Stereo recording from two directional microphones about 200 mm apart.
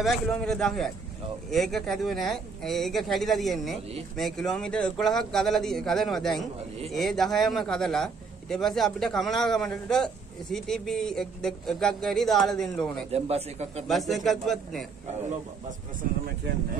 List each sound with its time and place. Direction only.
0.0 s a man's voice: centre (ahead or behind)
13.1 s a man's voice: 30° right (ahead or behind)
13.8 s a man's voice: centre (ahead or behind)